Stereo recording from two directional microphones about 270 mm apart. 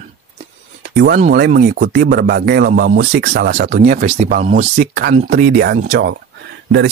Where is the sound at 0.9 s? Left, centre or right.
Right.